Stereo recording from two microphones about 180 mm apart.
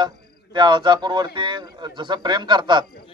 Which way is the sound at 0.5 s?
25° right (ahead or behind).